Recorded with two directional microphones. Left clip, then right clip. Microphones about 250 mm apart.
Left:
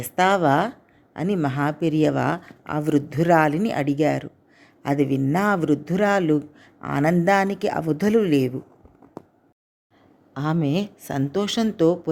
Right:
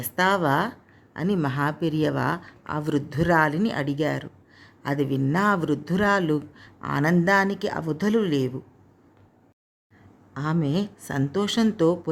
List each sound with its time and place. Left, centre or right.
0.0 s speech: centre
10.3 s speech: centre